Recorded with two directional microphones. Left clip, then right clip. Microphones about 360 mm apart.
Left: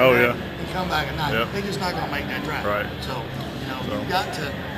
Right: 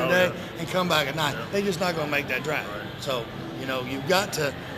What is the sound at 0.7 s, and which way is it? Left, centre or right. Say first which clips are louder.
Speech: right 1 dB; centre.